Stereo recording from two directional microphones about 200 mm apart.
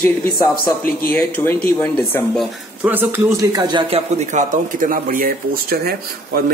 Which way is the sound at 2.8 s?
10° right (ahead or behind).